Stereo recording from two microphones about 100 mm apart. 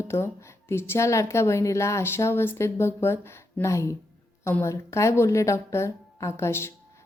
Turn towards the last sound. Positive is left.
turn(degrees=25)  # may be behind; listen again after turning